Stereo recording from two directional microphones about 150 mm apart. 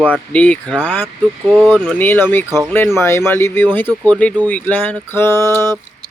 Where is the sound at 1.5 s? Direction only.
5° right (ahead or behind).